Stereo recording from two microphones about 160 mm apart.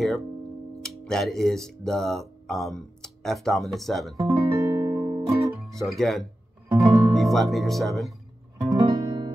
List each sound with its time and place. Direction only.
0.8 s speech: 5° left (ahead or behind)
4.2 s music: 20° right (ahead or behind)
5.7 s speech: centre (ahead or behind)
6.7 s music: 20° right (ahead or behind)
7.2 s speech: centre (ahead or behind)
8.7 s music: 30° right (ahead or behind)